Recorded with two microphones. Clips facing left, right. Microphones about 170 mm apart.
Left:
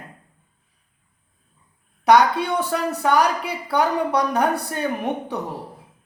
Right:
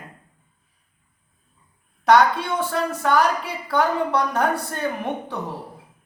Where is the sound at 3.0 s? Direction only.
15° left (ahead or behind).